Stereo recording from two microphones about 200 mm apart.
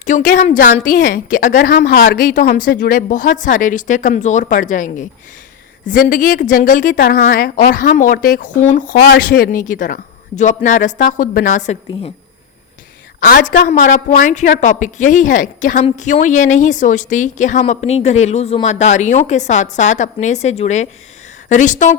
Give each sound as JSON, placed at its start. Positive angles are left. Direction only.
{"t": 0.0, "sound": "a woman's voice", "side_deg": 40}
{"t": 13.1, "sound": "a woman's voice", "side_deg": 45}